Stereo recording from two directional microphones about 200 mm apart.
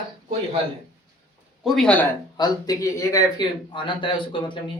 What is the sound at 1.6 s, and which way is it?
Speech, 5° left (ahead or behind).